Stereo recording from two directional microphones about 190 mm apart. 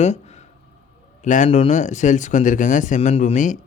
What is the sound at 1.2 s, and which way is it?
Speech, 40° left (ahead or behind).